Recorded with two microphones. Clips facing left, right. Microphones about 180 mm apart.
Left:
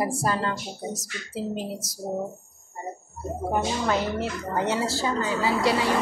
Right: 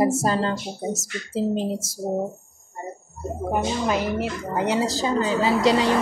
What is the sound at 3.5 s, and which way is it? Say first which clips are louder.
A woman's voice: right 2 dB; 15° right (ahead or behind).